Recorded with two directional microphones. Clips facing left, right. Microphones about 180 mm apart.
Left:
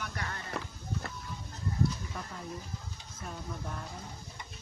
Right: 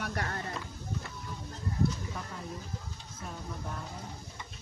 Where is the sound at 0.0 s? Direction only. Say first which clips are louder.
Right 4 dB; 45° right (ahead or behind).